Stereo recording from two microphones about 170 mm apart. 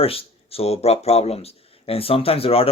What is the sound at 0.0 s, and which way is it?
Speech, 35° left (ahead or behind).